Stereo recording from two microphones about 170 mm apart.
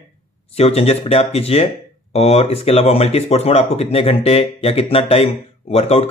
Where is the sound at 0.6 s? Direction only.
35° left (ahead or behind).